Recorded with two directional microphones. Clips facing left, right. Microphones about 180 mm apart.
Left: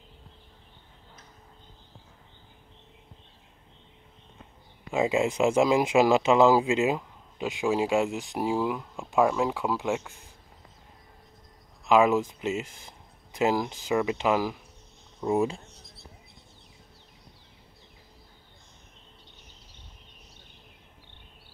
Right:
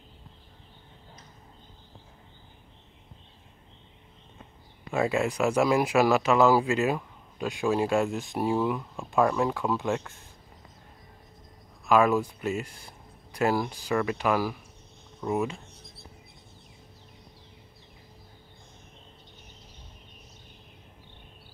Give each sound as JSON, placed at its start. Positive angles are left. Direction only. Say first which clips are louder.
{"t": 4.9, "sound": "speech", "louder": "left 1 dB", "side_deg": 20}
{"t": 11.8, "sound": "speech", "louder": "left 1 dB", "side_deg": 20}